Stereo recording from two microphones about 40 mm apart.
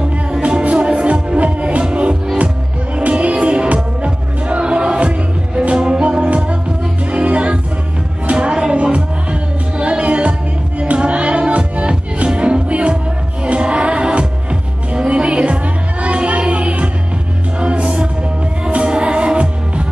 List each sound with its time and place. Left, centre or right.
0.3 s music: right